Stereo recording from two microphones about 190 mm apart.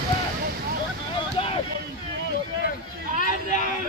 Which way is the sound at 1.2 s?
30° left (ahead or behind).